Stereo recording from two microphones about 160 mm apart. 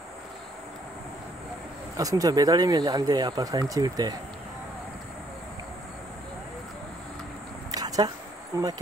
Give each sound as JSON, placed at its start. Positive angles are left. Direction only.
{"t": 2.0, "sound": "speech", "side_deg": -20}
{"t": 7.7, "sound": "a sound", "side_deg": -25}
{"t": 8.5, "sound": "speech", "side_deg": -20}